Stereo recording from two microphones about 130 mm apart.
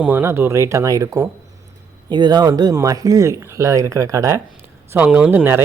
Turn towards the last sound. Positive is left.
turn(degrees=-15)  # may be behind; listen again after turning